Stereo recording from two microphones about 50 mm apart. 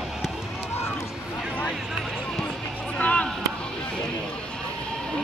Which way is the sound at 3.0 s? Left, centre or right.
Left.